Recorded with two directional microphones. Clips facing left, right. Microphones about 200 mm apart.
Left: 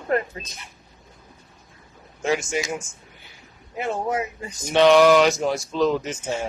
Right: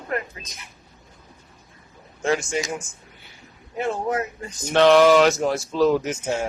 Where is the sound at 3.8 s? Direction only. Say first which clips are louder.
Right 1 dB; 10° left (ahead or behind).